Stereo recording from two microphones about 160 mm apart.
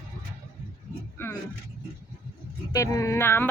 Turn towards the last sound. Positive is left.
turn(degrees=15)  # may be behind; listen again after turning